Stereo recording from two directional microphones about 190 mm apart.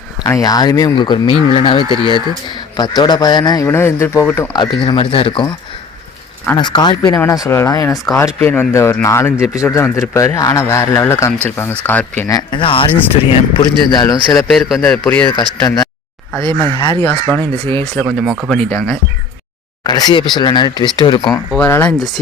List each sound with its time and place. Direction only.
0.3 s a man's voice: 20° left (ahead or behind)
6.6 s a man's voice: 25° left (ahead or behind)
14.4 s speech: centre (ahead or behind)
15.3 s a man's voice: 20° left (ahead or behind)
17.9 s speech: centre (ahead or behind)
19.8 s a man's voice: 20° left (ahead or behind)
21.6 s speech: 10° left (ahead or behind)